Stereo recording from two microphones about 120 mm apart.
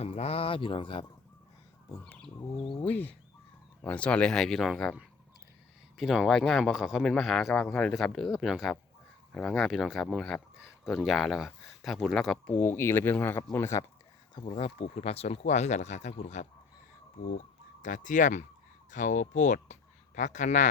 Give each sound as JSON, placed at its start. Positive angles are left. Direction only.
{"t": 0.0, "sound": "speech", "side_deg": 60}
{"t": 2.6, "sound": "speech", "side_deg": 50}
{"t": 2.8, "sound": "speech", "side_deg": 15}
{"t": 6.0, "sound": "speech", "side_deg": 0}
{"t": 12.5, "sound": "speech", "side_deg": 20}
{"t": 14.5, "sound": "speech", "side_deg": 55}
{"t": 17.8, "sound": "speech", "side_deg": 90}